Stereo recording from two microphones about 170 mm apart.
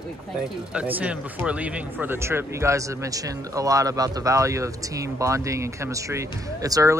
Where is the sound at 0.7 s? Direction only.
10° right (ahead or behind).